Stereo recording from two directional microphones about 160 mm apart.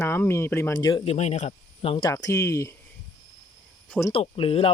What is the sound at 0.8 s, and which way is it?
Speech, 30° left (ahead or behind).